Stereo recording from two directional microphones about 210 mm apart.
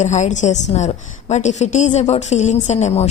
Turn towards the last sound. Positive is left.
turn(degrees=30)  # may be behind; listen again after turning